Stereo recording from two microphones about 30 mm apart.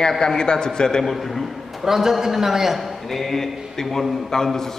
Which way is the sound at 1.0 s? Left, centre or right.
Centre.